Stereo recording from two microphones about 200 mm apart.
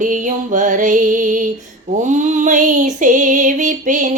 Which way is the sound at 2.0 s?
40° right (ahead or behind).